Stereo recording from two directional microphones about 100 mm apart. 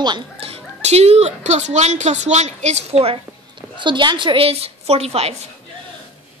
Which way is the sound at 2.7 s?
85° right.